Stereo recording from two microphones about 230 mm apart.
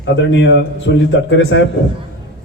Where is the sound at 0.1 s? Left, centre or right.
Left.